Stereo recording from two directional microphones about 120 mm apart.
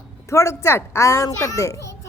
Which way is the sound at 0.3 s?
25° left (ahead or behind).